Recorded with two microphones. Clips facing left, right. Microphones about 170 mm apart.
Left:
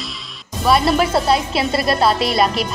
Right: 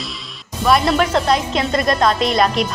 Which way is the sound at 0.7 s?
5° left (ahead or behind).